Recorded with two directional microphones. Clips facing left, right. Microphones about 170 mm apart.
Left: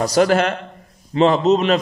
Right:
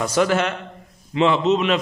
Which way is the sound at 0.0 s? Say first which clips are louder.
Left 4 dB; 35° left (ahead or behind).